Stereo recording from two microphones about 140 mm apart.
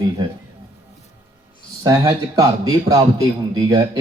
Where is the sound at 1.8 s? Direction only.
30° right (ahead or behind).